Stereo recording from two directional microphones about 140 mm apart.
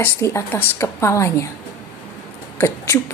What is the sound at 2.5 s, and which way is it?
Speech, 20° left (ahead or behind).